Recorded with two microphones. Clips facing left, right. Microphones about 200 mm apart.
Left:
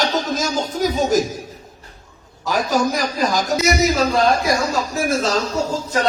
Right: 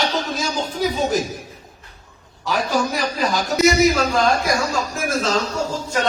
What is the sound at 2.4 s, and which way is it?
A man's voice, 40° left (ahead or behind).